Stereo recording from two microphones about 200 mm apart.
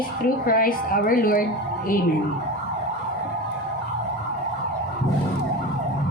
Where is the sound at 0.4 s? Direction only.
45° left (ahead or behind).